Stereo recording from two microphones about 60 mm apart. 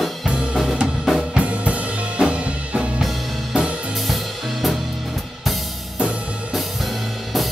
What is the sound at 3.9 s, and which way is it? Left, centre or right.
Music, centre.